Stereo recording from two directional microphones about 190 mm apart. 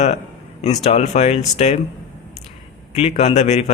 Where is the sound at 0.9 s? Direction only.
35° left (ahead or behind).